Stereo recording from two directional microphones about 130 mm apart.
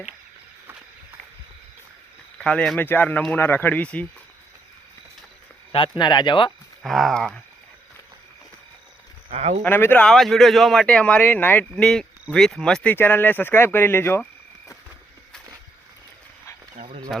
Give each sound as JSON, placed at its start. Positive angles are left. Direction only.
{"t": 2.4, "sound": "speech", "side_deg": 5}
{"t": 6.0, "sound": "speech", "side_deg": 35}
{"t": 6.8, "sound": "speech", "side_deg": 0}
{"t": 9.3, "sound": "speech", "side_deg": -55}
{"t": 9.6, "sound": "speech", "side_deg": 15}
{"t": 10.1, "sound": "speech", "side_deg": 0}